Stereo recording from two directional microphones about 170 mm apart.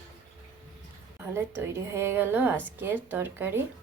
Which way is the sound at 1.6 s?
15° right (ahead or behind).